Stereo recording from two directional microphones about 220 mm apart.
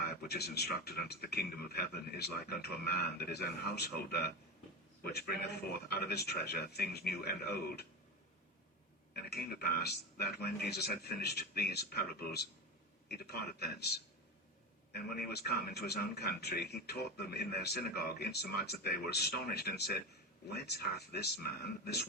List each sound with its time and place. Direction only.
0.0 s a man's voice: 45° left (ahead or behind)
9.1 s a man's voice: 45° left (ahead or behind)